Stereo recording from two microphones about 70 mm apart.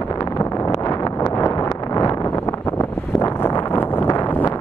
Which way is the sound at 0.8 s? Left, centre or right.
Left.